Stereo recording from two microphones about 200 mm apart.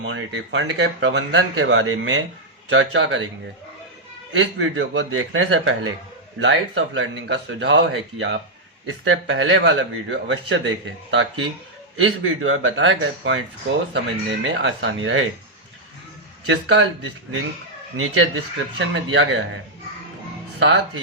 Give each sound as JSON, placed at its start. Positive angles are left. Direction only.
{"t": 0.0, "sound": "speech", "side_deg": -75}
{"t": 2.6, "sound": "speech", "side_deg": -75}
{"t": 4.3, "sound": "speech", "side_deg": -65}
{"t": 6.4, "sound": "speech", "side_deg": -70}
{"t": 9.0, "sound": "speech", "side_deg": -80}
{"t": 11.9, "sound": "a man's voice", "side_deg": -90}
{"t": 16.5, "sound": "speech", "side_deg": -65}
{"t": 17.9, "sound": "a man's voice", "side_deg": -90}
{"t": 18.8, "sound": "speech", "side_deg": -70}
{"t": 20.6, "sound": "speech", "side_deg": -65}